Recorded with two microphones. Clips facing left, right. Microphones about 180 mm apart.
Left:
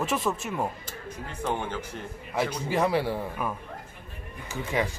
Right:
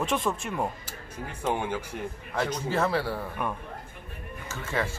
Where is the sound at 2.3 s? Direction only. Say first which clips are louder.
Left 1 dB; 10° left (ahead or behind).